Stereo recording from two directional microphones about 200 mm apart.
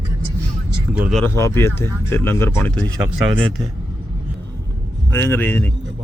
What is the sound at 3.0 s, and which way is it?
Speech, 5° right (ahead or behind).